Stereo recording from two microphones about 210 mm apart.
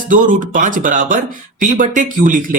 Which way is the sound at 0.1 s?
40° right (ahead or behind).